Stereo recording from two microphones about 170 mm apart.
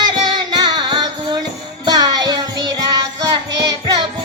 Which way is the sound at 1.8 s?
25° right (ahead or behind).